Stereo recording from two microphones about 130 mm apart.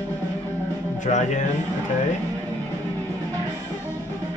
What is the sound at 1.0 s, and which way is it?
Speech, 70° left (ahead or behind).